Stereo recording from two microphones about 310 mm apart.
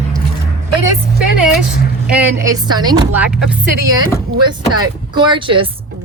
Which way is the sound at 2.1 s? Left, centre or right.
Centre.